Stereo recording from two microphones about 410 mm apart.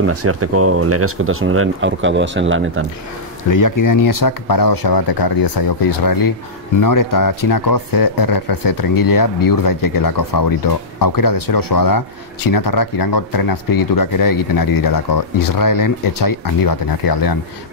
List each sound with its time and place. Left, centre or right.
0.0 s speech: right
3.4 s speech: left